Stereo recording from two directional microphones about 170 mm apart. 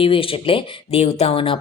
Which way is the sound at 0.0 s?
30° left (ahead or behind).